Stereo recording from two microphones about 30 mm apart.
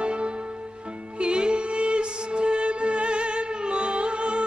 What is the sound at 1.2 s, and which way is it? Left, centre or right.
Music, right.